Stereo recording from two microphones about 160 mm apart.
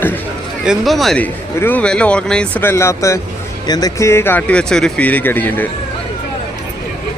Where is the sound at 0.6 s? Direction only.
Centre (ahead or behind).